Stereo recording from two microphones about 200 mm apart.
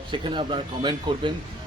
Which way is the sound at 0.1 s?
25° right (ahead or behind).